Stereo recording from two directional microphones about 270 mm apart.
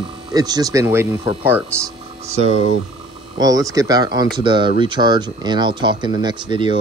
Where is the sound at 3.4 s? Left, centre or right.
Centre.